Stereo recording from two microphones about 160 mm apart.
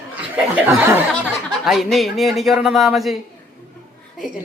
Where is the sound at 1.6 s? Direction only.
Centre (ahead or behind).